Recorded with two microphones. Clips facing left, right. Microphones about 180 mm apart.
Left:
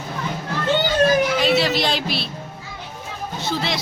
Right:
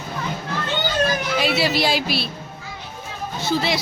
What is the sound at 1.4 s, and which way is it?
Speech, 5° right (ahead or behind).